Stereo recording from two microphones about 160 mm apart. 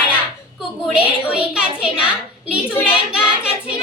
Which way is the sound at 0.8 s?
5° right (ahead or behind).